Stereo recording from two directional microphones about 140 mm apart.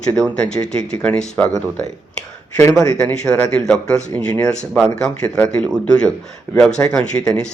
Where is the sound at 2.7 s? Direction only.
5° left (ahead or behind).